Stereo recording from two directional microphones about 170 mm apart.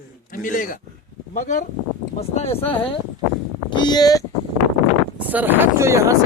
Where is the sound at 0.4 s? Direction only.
55° left (ahead or behind).